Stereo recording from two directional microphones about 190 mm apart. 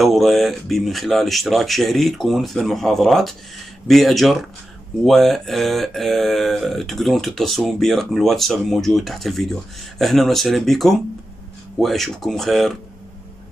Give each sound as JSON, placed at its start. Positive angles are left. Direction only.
{"t": 0.0, "sound": "speech", "side_deg": 0}